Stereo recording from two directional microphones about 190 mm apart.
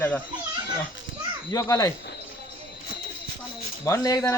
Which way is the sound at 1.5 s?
20° left (ahead or behind).